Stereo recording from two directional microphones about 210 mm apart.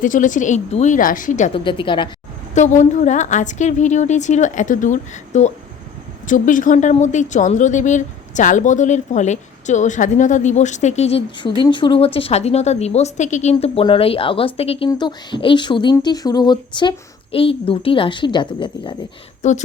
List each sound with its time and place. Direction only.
0.0 s speech: 40° left (ahead or behind)
2.6 s speech: 35° left (ahead or behind)
19.4 s speech: 35° left (ahead or behind)